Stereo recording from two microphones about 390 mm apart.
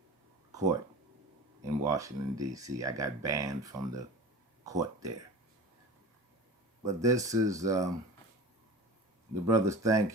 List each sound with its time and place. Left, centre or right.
1.6 s speech: centre
6.8 s speech: centre
9.3 s speech: centre